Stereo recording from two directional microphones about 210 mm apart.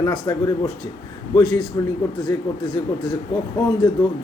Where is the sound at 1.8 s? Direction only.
15° left (ahead or behind).